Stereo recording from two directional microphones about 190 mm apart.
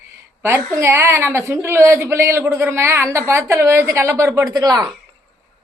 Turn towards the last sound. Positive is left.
turn(degrees=-20)  # may be behind; listen again after turning